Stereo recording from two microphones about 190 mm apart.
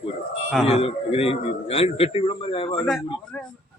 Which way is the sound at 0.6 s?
30° left (ahead or behind).